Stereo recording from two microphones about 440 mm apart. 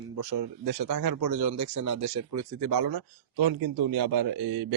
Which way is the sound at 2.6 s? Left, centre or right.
Right.